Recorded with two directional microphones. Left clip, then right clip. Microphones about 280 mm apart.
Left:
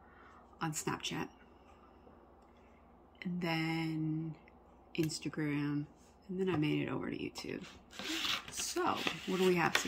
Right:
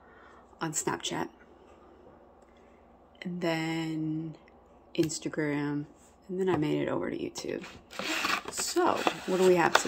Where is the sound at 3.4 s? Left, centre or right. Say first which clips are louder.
Right 6 dB; centre.